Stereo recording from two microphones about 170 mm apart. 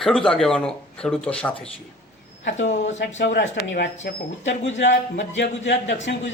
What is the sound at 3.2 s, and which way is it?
Speech, 80° left.